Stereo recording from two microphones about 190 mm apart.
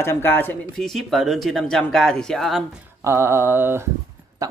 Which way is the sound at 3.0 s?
10° right (ahead or behind).